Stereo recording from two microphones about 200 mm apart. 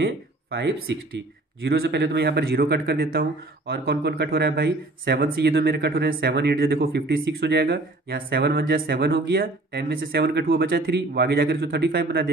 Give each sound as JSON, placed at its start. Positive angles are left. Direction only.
{"t": 0.0, "sound": "speech", "side_deg": -65}
{"t": 1.6, "sound": "speech", "side_deg": -55}